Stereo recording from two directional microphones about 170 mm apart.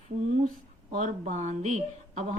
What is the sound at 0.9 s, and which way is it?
Speech, 45° right (ahead or behind).